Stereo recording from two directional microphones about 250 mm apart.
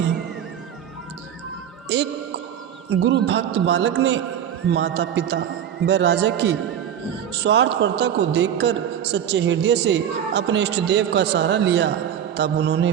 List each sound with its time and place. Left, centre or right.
1.9 s a woman's voice: right